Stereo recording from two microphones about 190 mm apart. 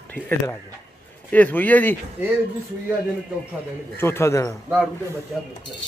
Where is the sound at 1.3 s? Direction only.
10° left (ahead or behind).